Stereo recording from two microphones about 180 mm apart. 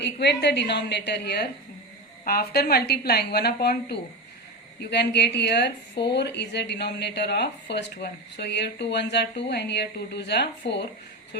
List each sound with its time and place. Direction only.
0.0 s a woman's voice: 70° left (ahead or behind)